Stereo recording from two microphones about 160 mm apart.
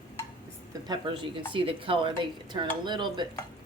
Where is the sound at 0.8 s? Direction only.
30° right (ahead or behind).